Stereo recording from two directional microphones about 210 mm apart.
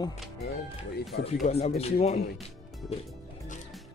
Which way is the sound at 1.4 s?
30° left (ahead or behind).